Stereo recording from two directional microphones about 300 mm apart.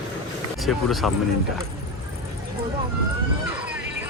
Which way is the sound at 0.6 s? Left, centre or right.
Centre.